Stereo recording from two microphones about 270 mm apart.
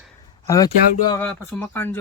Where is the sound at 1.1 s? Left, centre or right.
Centre.